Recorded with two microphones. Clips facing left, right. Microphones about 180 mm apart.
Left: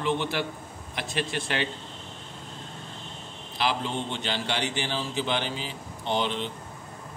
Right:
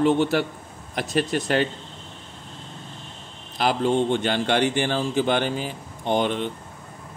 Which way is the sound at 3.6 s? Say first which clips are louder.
Right 8 dB; 50° right (ahead or behind).